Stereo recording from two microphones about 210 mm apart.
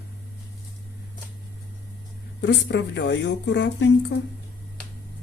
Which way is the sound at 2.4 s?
55° left (ahead or behind).